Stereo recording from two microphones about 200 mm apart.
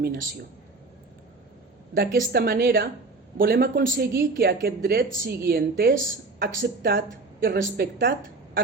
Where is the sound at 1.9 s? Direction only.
50° right (ahead or behind).